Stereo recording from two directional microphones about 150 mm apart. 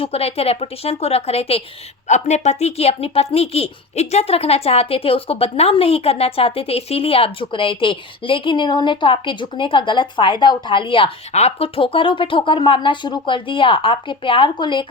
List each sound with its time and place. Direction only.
0.0 s speech: 40° left (ahead or behind)